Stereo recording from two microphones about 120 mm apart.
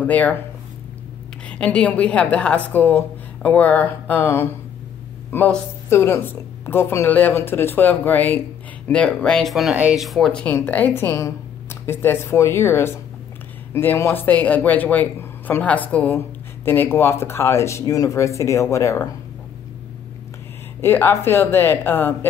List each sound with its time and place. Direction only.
0.0 s speech: 15° left (ahead or behind)
1.5 s speech: 10° left (ahead or behind)
20.8 s speech: 20° left (ahead or behind)